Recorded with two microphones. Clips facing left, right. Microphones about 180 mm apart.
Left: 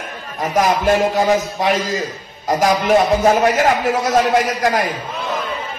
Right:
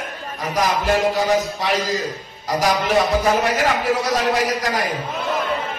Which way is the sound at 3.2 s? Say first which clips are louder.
Left 5 dB; 45° left (ahead or behind).